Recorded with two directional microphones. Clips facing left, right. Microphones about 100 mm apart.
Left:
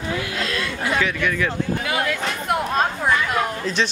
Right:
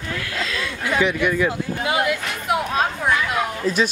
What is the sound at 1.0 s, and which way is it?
A woman's voice, 15° right (ahead or behind).